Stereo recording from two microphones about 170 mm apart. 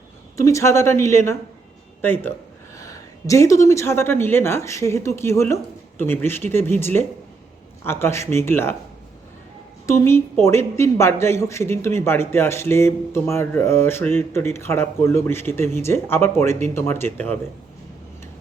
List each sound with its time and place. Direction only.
0.3 s a man's voice: 20° left (ahead or behind)
9.8 s a woman's voice: 15° left (ahead or behind)